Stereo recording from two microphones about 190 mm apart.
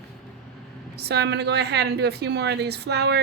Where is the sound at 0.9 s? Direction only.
60° right (ahead or behind).